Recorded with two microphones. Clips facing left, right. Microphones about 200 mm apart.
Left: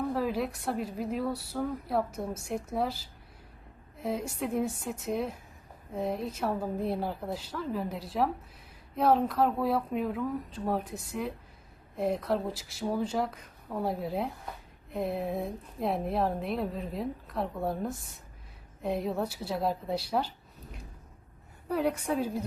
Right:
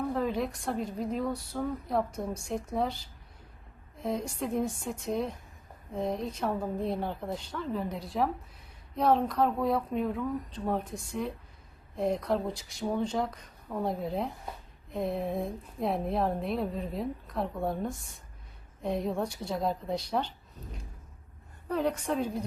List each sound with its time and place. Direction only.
0.1 s a woman's voice: 5° left (ahead or behind)
21.7 s a woman's voice: 10° left (ahead or behind)